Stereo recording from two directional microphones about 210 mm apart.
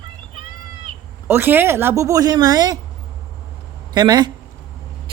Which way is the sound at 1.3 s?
10° right (ahead or behind).